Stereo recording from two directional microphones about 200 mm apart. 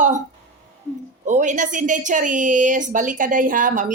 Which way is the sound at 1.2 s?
40° right (ahead or behind).